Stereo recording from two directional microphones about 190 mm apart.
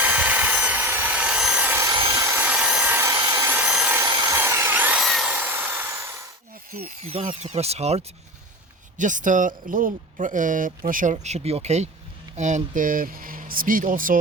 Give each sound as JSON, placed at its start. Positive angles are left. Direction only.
{"t": 0.0, "sound": "helicopter", "side_deg": -10}
{"t": 7.0, "sound": "speech", "side_deg": -30}